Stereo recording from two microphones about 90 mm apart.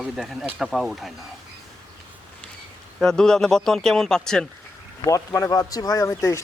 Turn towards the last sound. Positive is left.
turn(degrees=30)  # may be behind; listen again after turning